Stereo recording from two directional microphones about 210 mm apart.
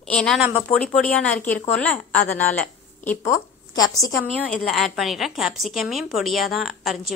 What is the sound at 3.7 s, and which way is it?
Speech, 20° left (ahead or behind).